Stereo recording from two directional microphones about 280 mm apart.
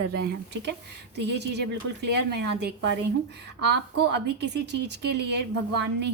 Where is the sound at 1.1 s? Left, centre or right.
Right.